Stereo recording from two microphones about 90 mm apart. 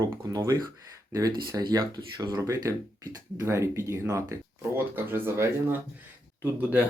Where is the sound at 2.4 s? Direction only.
35° right (ahead or behind).